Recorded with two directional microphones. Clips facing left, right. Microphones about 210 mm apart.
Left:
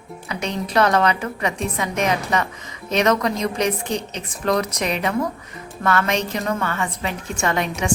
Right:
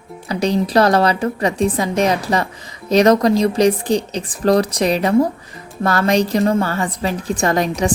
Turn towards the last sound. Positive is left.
turn(degrees=-35)  # may be behind; listen again after turning